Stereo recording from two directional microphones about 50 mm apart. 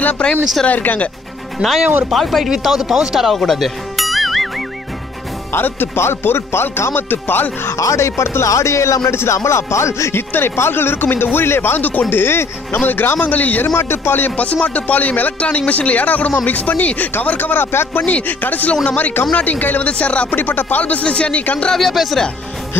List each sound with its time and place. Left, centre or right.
0.2 s speech: left
0.7 s speech: left
1.6 s speech: right
2.0 s speech: centre
5.5 s speech: left
7.7 s speech: left
10.1 s speech: left
13.7 s speech: left
14.4 s speech: left
15.3 s speech: left
18.0 s speech: left
19.9 s speech: left
20.3 s speech: left
21.7 s speech: centre